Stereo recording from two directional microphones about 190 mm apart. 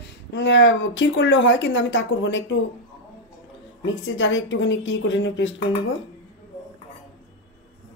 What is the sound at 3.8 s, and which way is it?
A woman's voice, 85° left.